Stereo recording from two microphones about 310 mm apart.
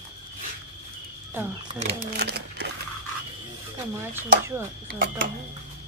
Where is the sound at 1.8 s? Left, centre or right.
Right.